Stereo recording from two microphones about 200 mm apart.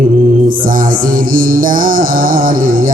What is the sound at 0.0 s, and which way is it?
Mantra, 45° right (ahead or behind).